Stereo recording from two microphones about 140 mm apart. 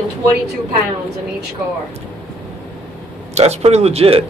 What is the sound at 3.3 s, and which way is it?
Speech, 50° right (ahead or behind).